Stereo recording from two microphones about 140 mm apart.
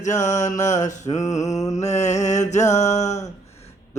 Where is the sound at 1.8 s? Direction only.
55° left (ahead or behind).